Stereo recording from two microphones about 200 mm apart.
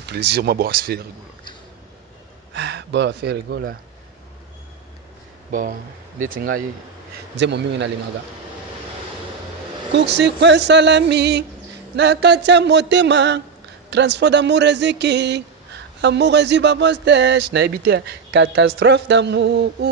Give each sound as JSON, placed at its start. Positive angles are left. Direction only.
{"t": 0.0, "sound": "speech", "side_deg": -55}
{"t": 2.5, "sound": "speech", "side_deg": -60}
{"t": 5.5, "sound": "speech", "side_deg": -40}
{"t": 7.3, "sound": "speech", "side_deg": -60}
{"t": 9.9, "sound": "speech", "side_deg": -60}